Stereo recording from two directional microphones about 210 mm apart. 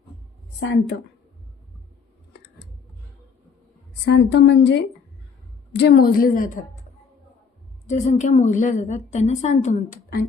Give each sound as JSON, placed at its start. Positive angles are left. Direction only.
{"t": 4.0, "sound": "a woman's voice", "side_deg": 55}
{"t": 7.9, "sound": "a woman's voice", "side_deg": 35}